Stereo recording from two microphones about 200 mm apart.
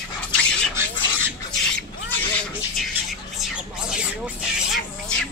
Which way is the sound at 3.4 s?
5° right (ahead or behind).